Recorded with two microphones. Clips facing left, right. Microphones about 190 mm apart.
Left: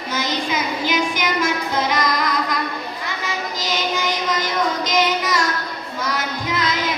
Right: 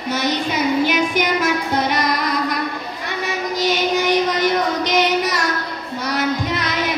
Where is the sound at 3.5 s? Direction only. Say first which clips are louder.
Right 7 dB; 65° right (ahead or behind).